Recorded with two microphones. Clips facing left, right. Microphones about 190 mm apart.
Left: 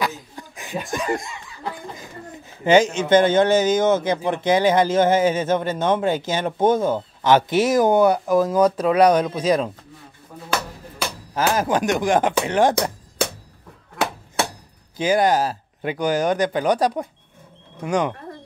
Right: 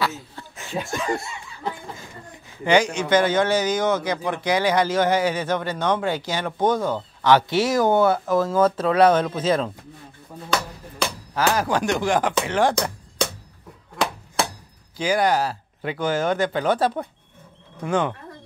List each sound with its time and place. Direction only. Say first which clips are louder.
0.4 s a sound: left 1 dB; 15° left (ahead or behind)
0.8 s speech: left 3 dB; 15° left (ahead or behind)
2.6 s a man's voice: left 3 dB; 25° left (ahead or behind)
11.5 s a man's voice: left 2 dB; 20° left (ahead or behind)
15.0 s speech: left 2 dB; 20° left (ahead or behind)